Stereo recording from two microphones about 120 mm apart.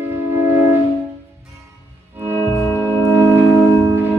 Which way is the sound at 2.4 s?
20° left (ahead or behind).